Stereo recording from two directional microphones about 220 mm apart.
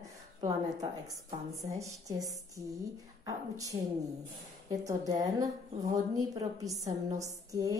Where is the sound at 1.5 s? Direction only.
15° right (ahead or behind).